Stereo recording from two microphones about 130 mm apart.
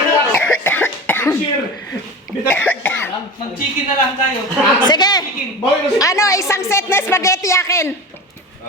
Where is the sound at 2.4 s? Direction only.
15° left (ahead or behind).